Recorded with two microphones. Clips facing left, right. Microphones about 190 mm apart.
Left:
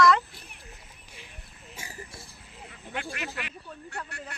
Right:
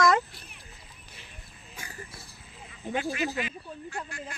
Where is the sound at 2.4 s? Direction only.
70° left (ahead or behind).